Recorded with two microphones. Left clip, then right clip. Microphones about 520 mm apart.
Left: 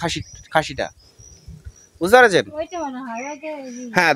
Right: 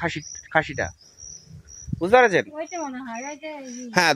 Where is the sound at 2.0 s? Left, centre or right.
Right.